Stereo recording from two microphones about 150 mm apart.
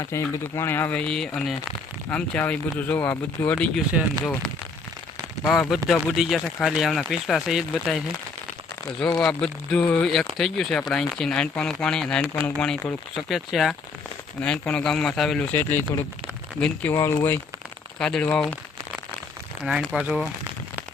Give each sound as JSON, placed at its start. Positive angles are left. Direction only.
{"t": 0.0, "sound": "speech", "side_deg": 20}
{"t": 9.1, "sound": "speech", "side_deg": 5}
{"t": 15.5, "sound": "speech", "side_deg": 15}
{"t": 16.9, "sound": "speech", "side_deg": 20}
{"t": 19.6, "sound": "speech", "side_deg": -5}